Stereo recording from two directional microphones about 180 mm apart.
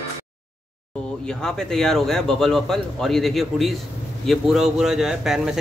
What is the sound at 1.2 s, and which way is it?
Speech, 5° left (ahead or behind).